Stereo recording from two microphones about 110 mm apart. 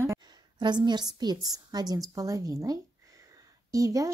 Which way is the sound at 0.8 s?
40° right (ahead or behind).